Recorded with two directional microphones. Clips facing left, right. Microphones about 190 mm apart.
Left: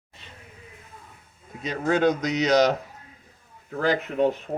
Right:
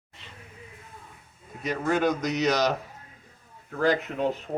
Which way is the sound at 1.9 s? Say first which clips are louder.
Left 3 dB; 25° left (ahead or behind).